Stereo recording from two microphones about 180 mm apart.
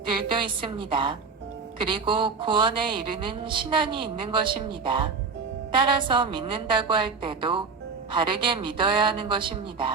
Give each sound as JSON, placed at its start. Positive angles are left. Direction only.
{"t": 0.1, "sound": "speech", "side_deg": -25}